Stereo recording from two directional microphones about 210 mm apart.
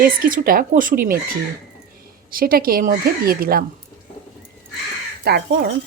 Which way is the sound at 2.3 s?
45° right (ahead or behind).